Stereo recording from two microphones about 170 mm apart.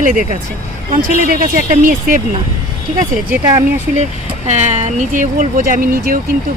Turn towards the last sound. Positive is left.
turn(degrees=-55)  # may be behind; listen again after turning